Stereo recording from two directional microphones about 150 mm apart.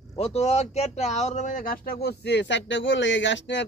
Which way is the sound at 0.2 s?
45° left (ahead or behind).